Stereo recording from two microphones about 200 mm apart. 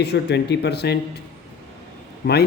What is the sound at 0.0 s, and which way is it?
Speech, 55° left (ahead or behind).